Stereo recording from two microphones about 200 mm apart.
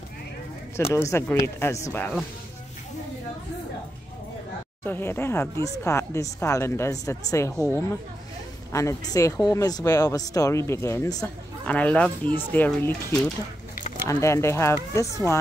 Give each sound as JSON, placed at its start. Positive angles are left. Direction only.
{"t": 0.7, "sound": "speech", "side_deg": 15}
{"t": 4.8, "sound": "speech", "side_deg": 10}